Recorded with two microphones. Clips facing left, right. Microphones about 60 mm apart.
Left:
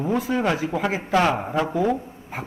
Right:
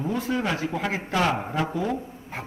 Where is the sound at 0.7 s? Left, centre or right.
Centre.